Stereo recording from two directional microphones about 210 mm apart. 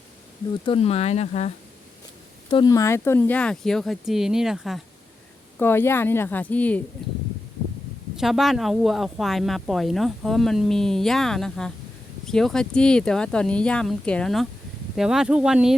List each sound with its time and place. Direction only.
0.6 s speech: 25° left (ahead or behind)
2.5 s speech: 20° left (ahead or behind); by 4.8 s centre (ahead or behind)
5.5 s speech: 10° left (ahead or behind)
8.1 s speech: centre (ahead or behind)